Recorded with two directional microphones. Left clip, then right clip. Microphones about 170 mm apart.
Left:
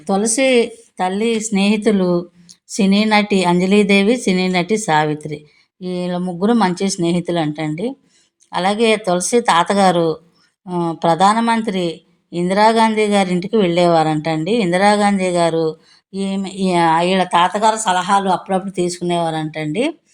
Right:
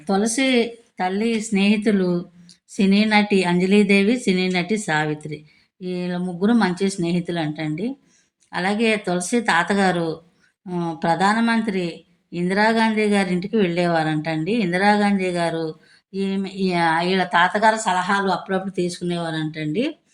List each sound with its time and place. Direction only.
0.0 s a woman's voice: 30° left (ahead or behind)